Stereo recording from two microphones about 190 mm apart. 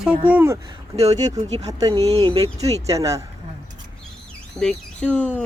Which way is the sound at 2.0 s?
30° right (ahead or behind).